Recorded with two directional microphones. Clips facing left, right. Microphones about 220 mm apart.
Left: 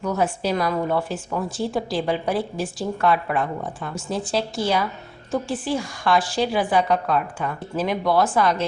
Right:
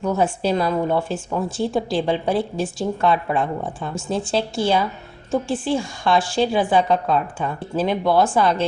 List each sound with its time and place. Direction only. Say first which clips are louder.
0.0 s a woman's voice: right 3 dB; 30° right (ahead or behind)